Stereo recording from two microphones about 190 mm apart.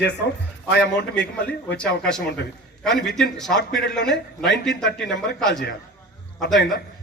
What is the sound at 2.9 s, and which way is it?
Speech, 65° left (ahead or behind).